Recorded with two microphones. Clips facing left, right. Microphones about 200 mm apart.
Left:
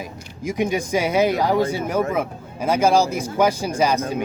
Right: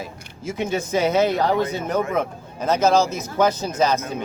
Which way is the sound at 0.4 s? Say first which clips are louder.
Left 2 dB; 15° left (ahead or behind).